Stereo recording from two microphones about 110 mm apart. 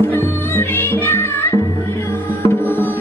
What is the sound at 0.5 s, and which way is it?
Music, 20° left (ahead or behind).